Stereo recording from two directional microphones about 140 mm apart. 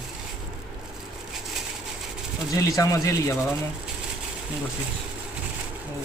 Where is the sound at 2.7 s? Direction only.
25° left (ahead or behind).